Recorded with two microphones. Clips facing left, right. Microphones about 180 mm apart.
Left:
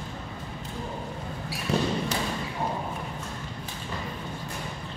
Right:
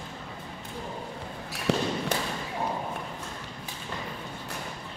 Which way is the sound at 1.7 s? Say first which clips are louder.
Even; 75° right (ahead or behind).